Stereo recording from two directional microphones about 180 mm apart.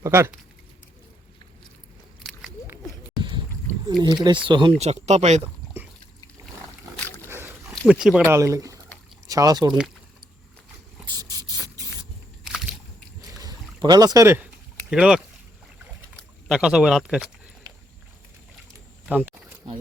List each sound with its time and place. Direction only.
0.0 s speech: 15° right (ahead or behind)
4.0 s speech: 25° right (ahead or behind)
4.8 s speech: 40° right (ahead or behind)
7.0 s dog: 10° left (ahead or behind)
7.3 s a sound: 15° right (ahead or behind)
7.9 s speech: 5° right (ahead or behind)
8.3 s speech: 15° right (ahead or behind)
11.1 s a sound: 20° right (ahead or behind)
12.5 s a sound: centre (ahead or behind)
13.4 s rowboat: 20° right (ahead or behind)
14.8 s speech: 5° right (ahead or behind)
19.0 s speech: 10° right (ahead or behind)